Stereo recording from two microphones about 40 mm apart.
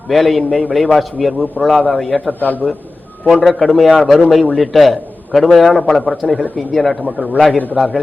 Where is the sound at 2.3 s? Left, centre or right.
Left.